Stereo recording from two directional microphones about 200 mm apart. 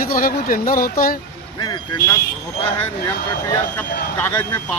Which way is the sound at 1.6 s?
15° left (ahead or behind).